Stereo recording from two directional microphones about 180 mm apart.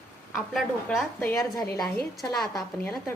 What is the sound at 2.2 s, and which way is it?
Speech, 20° left (ahead or behind).